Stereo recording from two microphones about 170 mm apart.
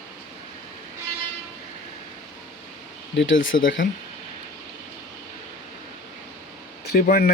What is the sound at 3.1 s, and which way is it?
Speech, 90° left.